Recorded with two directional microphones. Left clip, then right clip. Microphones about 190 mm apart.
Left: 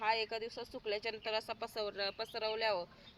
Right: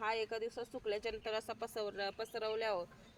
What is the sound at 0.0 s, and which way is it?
Speech, 25° right (ahead or behind).